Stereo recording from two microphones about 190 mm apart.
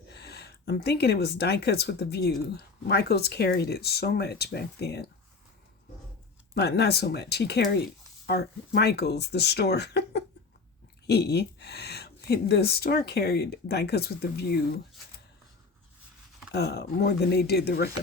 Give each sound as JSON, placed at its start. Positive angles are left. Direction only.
{"t": 0.1, "sound": "speech", "side_deg": 60}
{"t": 6.5, "sound": "speech", "side_deg": 60}
{"t": 16.5, "sound": "speech", "side_deg": 60}